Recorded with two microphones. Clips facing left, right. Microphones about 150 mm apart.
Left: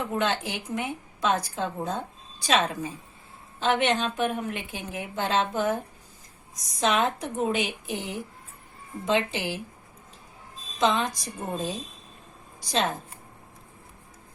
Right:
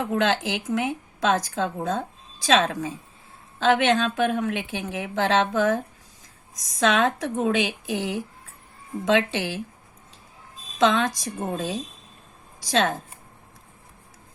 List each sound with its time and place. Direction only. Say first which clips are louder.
0.2 s a woman's voice: right 4 dB; 90° right
10.8 s a woman's voice: right 4 dB; 90° right